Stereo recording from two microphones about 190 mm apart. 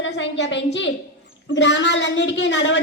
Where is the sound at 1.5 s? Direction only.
75° left (ahead or behind).